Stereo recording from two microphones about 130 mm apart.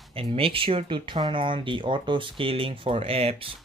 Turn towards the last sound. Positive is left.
turn(degrees=-50)  # may be behind; listen again after turning